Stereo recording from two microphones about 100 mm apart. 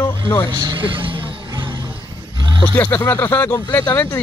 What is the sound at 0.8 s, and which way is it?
Music, 60° right (ahead or behind).